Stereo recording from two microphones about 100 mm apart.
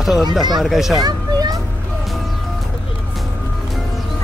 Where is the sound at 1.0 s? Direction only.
40° right (ahead or behind).